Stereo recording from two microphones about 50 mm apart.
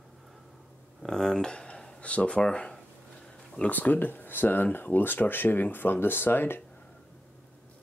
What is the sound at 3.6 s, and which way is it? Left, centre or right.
Speech, left.